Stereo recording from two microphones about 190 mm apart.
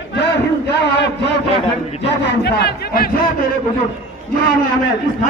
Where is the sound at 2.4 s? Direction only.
60° left (ahead or behind).